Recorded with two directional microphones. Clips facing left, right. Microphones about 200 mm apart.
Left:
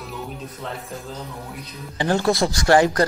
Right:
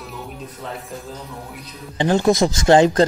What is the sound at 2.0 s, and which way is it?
Speech, 20° right (ahead or behind).